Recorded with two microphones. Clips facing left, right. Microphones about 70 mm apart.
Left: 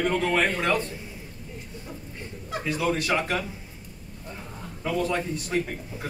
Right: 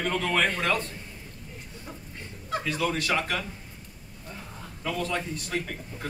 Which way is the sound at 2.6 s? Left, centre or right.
Centre.